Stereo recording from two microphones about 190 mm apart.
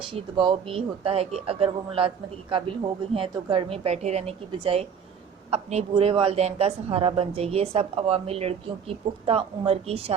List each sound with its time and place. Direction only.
0.1 s a man's voice: 25° right (ahead or behind)